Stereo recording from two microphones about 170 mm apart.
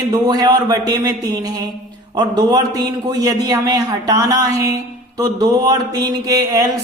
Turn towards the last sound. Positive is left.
turn(degrees=-20)  # may be behind; listen again after turning